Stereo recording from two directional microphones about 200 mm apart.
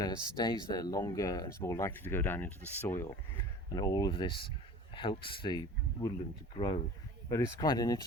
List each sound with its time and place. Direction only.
0.0 s speech: 20° left (ahead or behind)
7.3 s speech: 15° left (ahead or behind)